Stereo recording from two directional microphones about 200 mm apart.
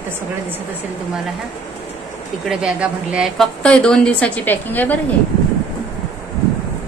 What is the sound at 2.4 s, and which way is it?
A woman's voice, 5° right (ahead or behind).